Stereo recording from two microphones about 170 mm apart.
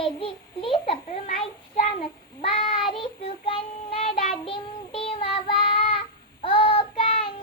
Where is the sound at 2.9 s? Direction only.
30° left (ahead or behind).